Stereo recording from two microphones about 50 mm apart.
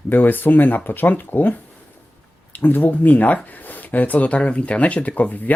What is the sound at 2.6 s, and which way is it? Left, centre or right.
Speech, left.